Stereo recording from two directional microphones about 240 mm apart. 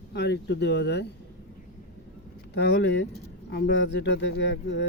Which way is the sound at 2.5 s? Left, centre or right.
Left.